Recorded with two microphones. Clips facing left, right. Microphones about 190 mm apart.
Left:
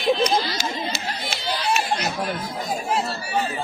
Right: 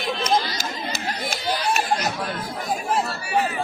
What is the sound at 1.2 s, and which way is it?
Speech, 45° right (ahead or behind).